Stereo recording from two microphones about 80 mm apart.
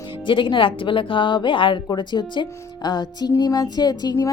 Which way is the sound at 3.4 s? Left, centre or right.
Left.